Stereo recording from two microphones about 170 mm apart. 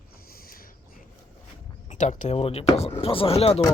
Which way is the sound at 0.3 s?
60° left (ahead or behind).